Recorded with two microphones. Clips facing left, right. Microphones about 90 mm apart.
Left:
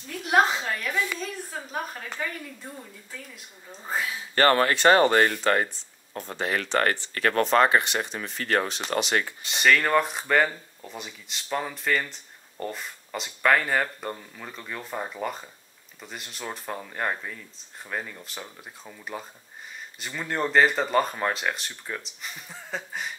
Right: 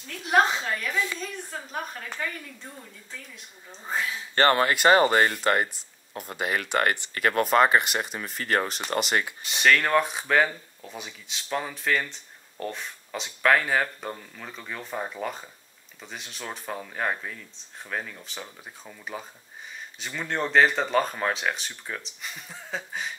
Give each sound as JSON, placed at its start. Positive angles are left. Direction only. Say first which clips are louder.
{"t": 0.2, "sound": "speech", "louder": "even", "side_deg": 0}
{"t": 4.4, "sound": "speech", "louder": "left 1 dB", "side_deg": -20}
{"t": 4.6, "sound": "speech", "louder": "left 1 dB", "side_deg": -5}